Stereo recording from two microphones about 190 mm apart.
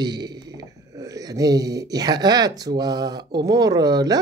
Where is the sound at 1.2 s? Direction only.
20° right (ahead or behind).